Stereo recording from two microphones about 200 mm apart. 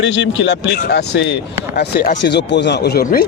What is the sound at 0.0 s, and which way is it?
A man's voice, 70° left (ahead or behind).